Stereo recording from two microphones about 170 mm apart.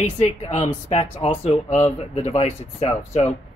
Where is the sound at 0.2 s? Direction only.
40° left (ahead or behind).